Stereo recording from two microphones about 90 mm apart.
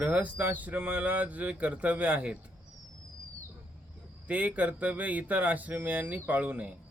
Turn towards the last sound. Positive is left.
turn(degrees=-15)  # may be behind; listen again after turning